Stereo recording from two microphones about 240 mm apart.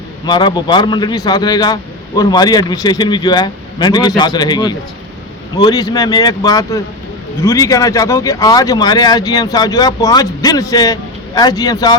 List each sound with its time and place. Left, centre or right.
0.3 s speech: centre